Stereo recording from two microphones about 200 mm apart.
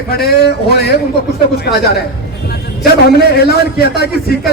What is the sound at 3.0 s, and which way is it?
A man's voice, 50° left (ahead or behind).